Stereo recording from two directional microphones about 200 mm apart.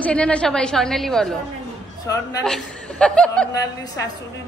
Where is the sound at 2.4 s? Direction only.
5° left (ahead or behind).